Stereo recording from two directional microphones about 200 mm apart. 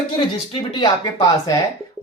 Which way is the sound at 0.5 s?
25° left (ahead or behind).